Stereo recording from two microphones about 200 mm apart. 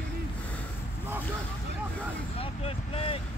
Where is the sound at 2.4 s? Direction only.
30° left (ahead or behind).